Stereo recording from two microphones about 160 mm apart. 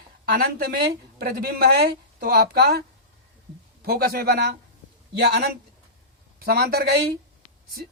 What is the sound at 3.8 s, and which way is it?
A woman's voice, 75° right (ahead or behind).